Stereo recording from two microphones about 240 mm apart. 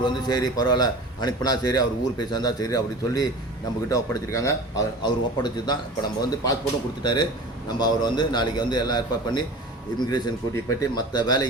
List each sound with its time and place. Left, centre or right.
0.0 s a man's voice: centre